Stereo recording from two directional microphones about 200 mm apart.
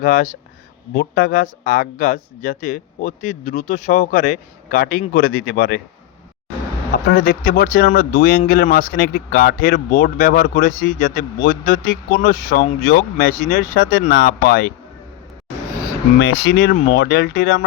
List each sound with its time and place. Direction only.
0.0 s speech: 45° left (ahead or behind)
6.9 s speech: 45° left (ahead or behind)
16.6 s speech: 50° left (ahead or behind)